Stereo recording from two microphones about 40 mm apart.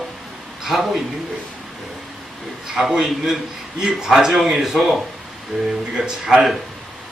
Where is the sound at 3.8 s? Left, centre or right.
Centre.